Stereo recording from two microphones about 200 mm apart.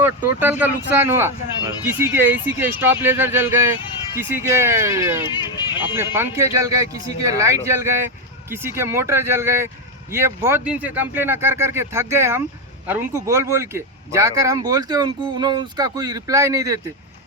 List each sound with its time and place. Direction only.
0.0 s speech: 10° right (ahead or behind)